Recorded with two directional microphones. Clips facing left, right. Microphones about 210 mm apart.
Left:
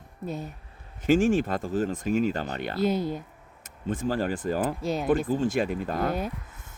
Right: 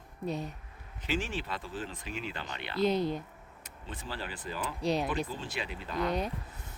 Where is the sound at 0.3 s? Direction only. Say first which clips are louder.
Left 1 dB; centre (ahead or behind).